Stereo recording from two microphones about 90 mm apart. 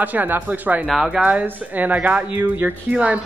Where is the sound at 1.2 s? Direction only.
20° right (ahead or behind).